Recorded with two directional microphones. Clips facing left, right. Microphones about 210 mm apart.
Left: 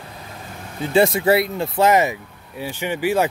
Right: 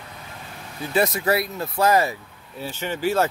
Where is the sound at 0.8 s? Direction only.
30° left (ahead or behind).